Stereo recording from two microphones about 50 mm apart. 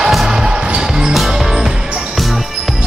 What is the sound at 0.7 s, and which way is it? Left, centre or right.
Basketball bounce, centre.